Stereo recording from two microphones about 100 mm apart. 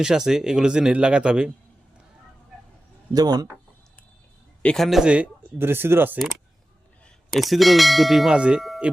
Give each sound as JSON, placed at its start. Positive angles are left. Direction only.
{"t": 0.0, "sound": "speech", "side_deg": -5}
{"t": 3.1, "sound": "speech", "side_deg": -40}
{"t": 4.6, "sound": "speech", "side_deg": 10}
{"t": 4.9, "sound": "speech", "side_deg": -5}
{"t": 7.3, "sound": "bell", "side_deg": 0}